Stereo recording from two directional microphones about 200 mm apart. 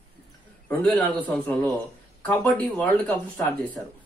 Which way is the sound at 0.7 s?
5° left (ahead or behind).